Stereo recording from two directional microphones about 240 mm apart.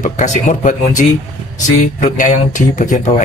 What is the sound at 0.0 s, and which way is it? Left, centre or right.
Speech, left.